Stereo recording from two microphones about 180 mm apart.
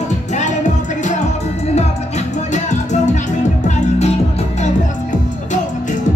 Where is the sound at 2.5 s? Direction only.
40° left (ahead or behind).